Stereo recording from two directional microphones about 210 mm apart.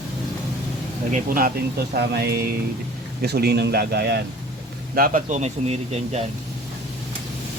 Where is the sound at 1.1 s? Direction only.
40° right (ahead or behind).